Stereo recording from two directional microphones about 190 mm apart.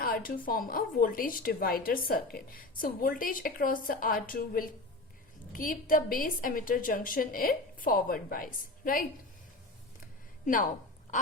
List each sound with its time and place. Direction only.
0.0 s a sound: 50° left (ahead or behind)
0.4 s a woman's voice: 50° left (ahead or behind)
10.4 s speech: 45° left (ahead or behind)